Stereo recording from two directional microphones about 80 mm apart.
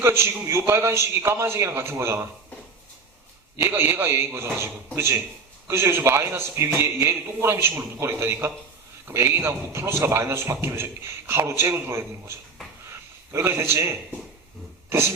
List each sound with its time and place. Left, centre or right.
0.0 s a man's voice: right
3.6 s a man's voice: right
13.3 s a man's voice: right